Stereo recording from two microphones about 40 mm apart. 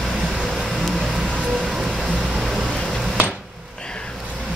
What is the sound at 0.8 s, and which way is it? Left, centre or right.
Music, centre.